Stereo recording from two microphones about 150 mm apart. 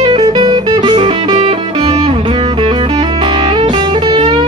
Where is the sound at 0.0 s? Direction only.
30° right (ahead or behind).